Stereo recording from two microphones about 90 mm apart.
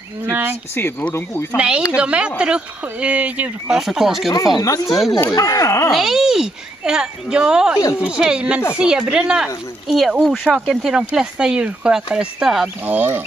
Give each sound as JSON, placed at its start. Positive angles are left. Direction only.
{"t": 0.3, "sound": "speech", "side_deg": -20}
{"t": 1.1, "sound": "speech", "side_deg": 30}
{"t": 2.0, "sound": "speech", "side_deg": -10}
{"t": 3.7, "sound": "speech", "side_deg": -5}
{"t": 4.6, "sound": "speech", "side_deg": 40}
{"t": 4.8, "sound": "speech", "side_deg": 0}
{"t": 5.3, "sound": "speech", "side_deg": 40}
{"t": 5.9, "sound": "speech", "side_deg": -5}
{"t": 12.6, "sound": "speech", "side_deg": -20}